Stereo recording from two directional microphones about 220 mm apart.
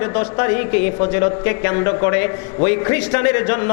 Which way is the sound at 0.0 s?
20° left (ahead or behind).